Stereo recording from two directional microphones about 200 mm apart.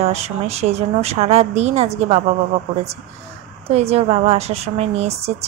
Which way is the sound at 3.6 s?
30° right (ahead or behind).